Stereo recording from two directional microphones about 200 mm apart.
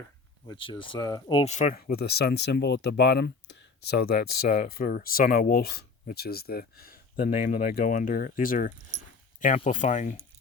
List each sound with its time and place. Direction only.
0.4 s speech: 25° left (ahead or behind)
1.9 s speech: 55° left (ahead or behind); by 10.2 s 40° left (ahead or behind)